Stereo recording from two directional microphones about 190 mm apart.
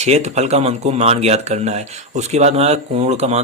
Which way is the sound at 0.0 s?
35° right (ahead or behind).